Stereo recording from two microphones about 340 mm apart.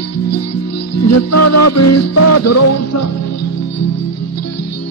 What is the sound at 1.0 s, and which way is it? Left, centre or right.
Music, left.